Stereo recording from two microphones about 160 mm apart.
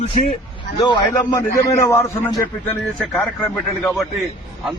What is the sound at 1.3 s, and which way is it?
A man's voice, 20° left (ahead or behind).